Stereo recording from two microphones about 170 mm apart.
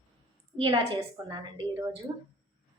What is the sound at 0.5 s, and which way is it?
A woman's voice, 25° right (ahead or behind).